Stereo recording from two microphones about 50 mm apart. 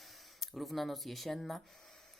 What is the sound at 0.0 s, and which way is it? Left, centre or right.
Speech, centre.